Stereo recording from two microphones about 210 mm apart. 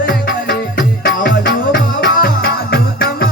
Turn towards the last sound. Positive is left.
turn(degrees=50)  # may be behind; listen again after turning